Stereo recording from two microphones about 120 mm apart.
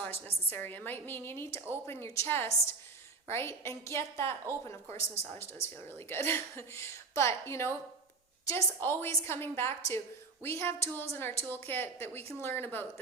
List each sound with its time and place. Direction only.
0.5 s a woman's voice: 15° left (ahead or behind)